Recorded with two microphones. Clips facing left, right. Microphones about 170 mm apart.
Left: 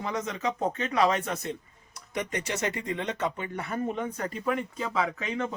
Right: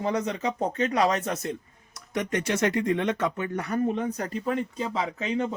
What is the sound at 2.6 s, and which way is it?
Speech, 60° right (ahead or behind).